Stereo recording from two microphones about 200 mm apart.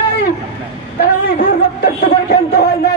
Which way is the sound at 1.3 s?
50° left (ahead or behind).